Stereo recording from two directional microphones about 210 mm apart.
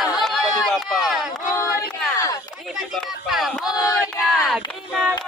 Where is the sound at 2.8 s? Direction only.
Centre (ahead or behind).